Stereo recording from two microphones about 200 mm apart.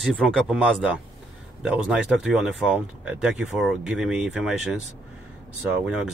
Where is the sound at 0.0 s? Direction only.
Centre (ahead or behind).